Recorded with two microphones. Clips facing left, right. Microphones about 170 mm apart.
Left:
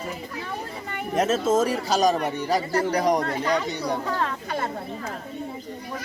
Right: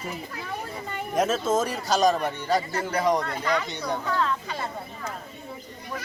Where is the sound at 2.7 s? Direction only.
40° left (ahead or behind).